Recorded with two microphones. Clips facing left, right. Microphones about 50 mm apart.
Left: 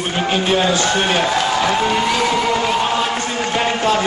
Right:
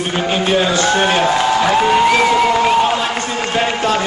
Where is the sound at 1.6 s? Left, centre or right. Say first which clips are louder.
Right 4 dB; right.